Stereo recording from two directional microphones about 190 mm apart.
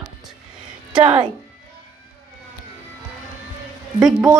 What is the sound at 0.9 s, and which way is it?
Speech, 25° right (ahead or behind).